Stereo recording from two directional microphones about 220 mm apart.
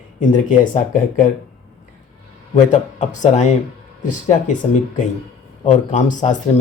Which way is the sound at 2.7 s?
35° left (ahead or behind).